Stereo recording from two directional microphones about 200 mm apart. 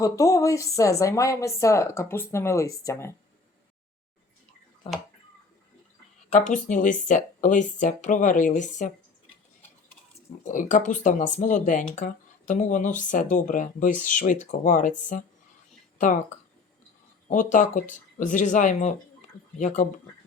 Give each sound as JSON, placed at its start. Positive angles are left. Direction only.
{"t": 0.0, "sound": "speech", "side_deg": 15}
{"t": 4.8, "sound": "speech", "side_deg": 30}
{"t": 6.3, "sound": "speech", "side_deg": 40}
{"t": 10.4, "sound": "speech", "side_deg": 40}
{"t": 17.2, "sound": "speech", "side_deg": 40}